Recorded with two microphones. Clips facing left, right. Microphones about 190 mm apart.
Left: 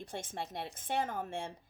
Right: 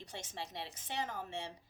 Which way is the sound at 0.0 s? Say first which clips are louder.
Left 5 dB; 55° left (ahead or behind).